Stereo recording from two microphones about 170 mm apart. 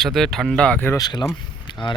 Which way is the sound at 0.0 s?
Centre (ahead or behind).